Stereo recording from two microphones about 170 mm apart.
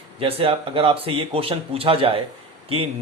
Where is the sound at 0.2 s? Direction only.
35° right (ahead or behind).